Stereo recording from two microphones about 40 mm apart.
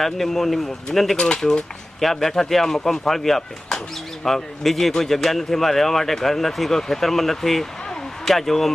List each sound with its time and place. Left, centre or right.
0.0 s speech: centre
1.1 s speech: left
2.0 s a man's voice: centre